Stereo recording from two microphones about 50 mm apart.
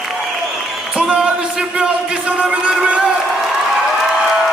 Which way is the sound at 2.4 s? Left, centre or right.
Right.